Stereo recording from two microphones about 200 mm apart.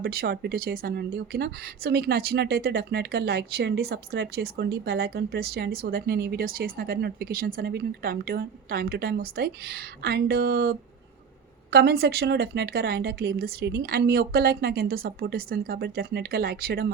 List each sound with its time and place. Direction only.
0.0 s speech: 50° right (ahead or behind)